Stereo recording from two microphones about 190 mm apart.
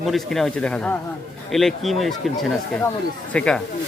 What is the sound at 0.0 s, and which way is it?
Speech, centre (ahead or behind).